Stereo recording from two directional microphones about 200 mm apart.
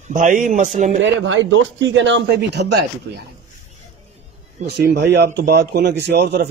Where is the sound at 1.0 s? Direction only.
65° right (ahead or behind).